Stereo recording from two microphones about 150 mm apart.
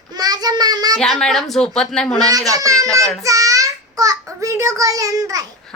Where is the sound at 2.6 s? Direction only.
20° right (ahead or behind).